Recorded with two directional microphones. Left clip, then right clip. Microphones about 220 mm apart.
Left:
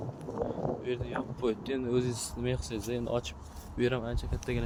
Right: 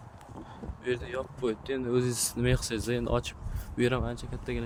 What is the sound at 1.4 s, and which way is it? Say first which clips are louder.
Speech: even; 5° right (ahead or behind).